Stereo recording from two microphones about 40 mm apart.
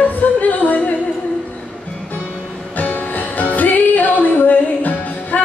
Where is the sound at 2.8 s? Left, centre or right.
Left.